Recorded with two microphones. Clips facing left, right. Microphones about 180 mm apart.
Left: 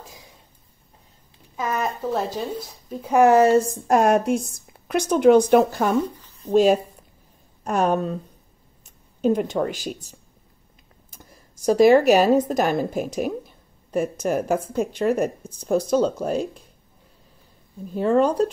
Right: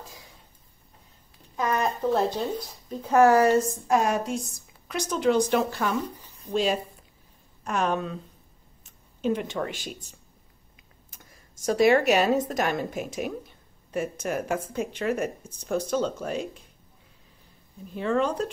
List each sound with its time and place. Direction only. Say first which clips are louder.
1.6 s a sound: even; 10° left (ahead or behind)
2.9 s speech: left 3 dB; 10° left (ahead or behind); by 3.7 s 25° left (ahead or behind)
3.8 s a woman's voice: left 6 dB; 50° left (ahead or behind)
11.1 s speech: left 6 dB; 35° left (ahead or behind)
17.9 s speech: left 7 dB; 40° left (ahead or behind)